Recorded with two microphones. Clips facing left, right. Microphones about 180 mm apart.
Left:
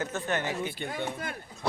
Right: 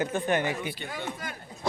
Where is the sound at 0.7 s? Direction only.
50° left (ahead or behind).